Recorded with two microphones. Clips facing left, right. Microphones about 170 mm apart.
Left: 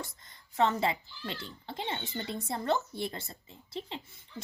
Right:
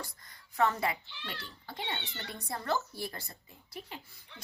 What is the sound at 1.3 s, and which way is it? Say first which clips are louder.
Speech: left 4 dB; 25° left (ahead or behind).